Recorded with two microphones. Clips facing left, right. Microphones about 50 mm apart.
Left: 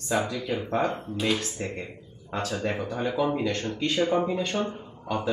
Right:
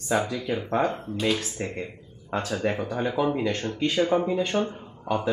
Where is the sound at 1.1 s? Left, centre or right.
Centre.